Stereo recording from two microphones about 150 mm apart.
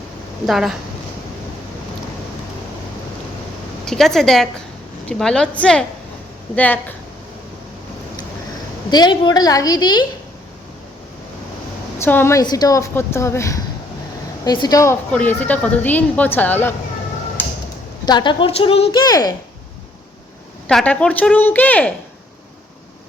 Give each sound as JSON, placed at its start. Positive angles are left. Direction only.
{"t": 0.4, "sound": "a woman's voice", "side_deg": 0}
{"t": 3.8, "sound": "a woman's voice", "side_deg": 0}
{"t": 8.9, "sound": "a woman's voice", "side_deg": 30}
{"t": 11.9, "sound": "a woman's voice", "side_deg": 15}
{"t": 15.1, "sound": "speech", "side_deg": 10}
{"t": 18.0, "sound": "a woman's voice", "side_deg": 30}
{"t": 18.9, "sound": "a woman's voice", "side_deg": 25}
{"t": 20.7, "sound": "speech", "side_deg": 5}